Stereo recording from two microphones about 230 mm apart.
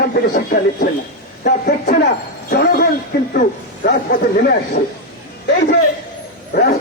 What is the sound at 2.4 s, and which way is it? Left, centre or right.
A man's voice, left.